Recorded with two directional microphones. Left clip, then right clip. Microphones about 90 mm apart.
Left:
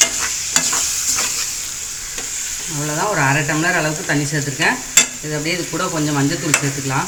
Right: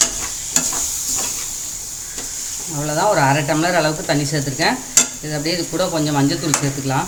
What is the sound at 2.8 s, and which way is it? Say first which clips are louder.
Speech: right 2 dB; 50° right (ahead or behind).